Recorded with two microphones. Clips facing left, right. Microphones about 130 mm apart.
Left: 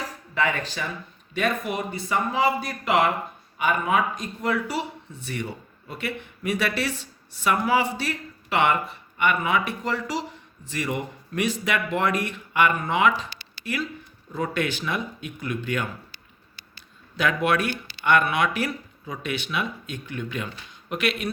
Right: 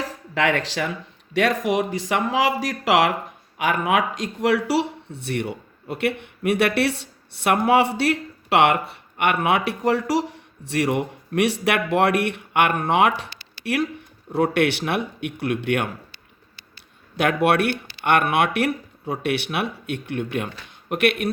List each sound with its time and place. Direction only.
0.3 s speech: 90° right
3.6 s speech: 80° right
17.2 s speech: 60° right (ahead or behind)